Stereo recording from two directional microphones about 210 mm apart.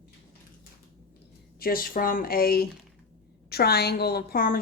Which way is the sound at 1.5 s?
45° left (ahead or behind).